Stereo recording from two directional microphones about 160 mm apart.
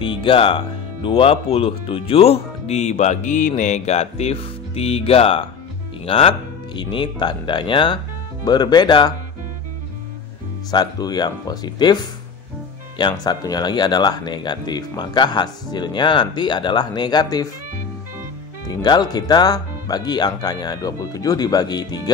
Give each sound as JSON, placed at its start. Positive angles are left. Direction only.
{"t": 0.0, "sound": "speech", "side_deg": 35}
{"t": 10.7, "sound": "speech", "side_deg": 25}
{"t": 18.7, "sound": "speech", "side_deg": 25}